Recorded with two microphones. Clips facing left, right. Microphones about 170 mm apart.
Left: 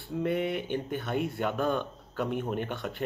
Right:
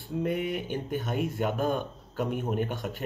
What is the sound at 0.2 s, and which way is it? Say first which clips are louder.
Speech: left 1 dB; 40° right (ahead or behind).